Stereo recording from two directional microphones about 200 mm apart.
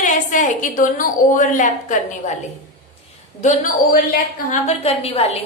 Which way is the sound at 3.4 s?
40° left (ahead or behind).